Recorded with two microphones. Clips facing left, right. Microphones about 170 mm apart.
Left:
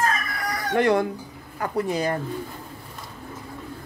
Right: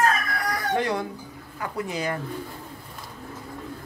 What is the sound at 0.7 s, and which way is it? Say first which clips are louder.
Speech: left 8 dB; 60° left (ahead or behind).